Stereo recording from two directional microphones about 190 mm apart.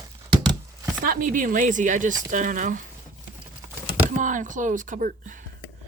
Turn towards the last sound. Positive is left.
turn(degrees=-45)  # may be behind; listen again after turning